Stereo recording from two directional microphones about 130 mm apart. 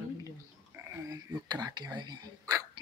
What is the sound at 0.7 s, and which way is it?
Whispering, 20° right (ahead or behind).